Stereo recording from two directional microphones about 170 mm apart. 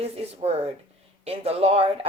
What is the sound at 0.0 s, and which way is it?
Speech, 35° right (ahead or behind).